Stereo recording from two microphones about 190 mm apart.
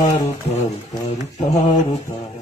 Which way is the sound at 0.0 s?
35° left (ahead or behind).